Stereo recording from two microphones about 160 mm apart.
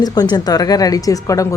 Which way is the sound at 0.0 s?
25° left (ahead or behind).